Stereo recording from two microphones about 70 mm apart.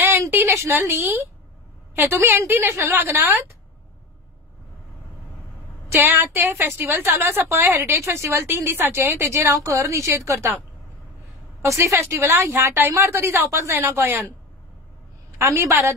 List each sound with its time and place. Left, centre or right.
0.4 s a sound: right
0.7 s a woman's voice: right
6.0 s a woman's voice: right
11.6 s a woman's voice: right
15.3 s a woman's voice: right